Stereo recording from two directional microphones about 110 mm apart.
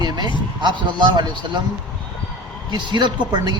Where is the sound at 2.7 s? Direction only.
45° right (ahead or behind).